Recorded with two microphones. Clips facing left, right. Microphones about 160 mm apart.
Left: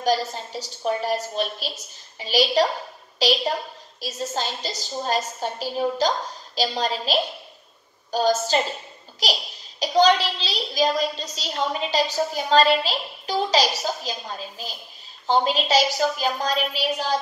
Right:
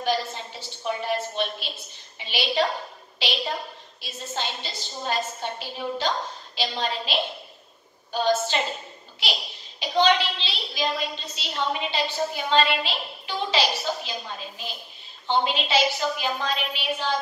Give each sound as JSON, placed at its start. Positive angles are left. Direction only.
{"t": 0.0, "sound": "a child's voice", "side_deg": 40}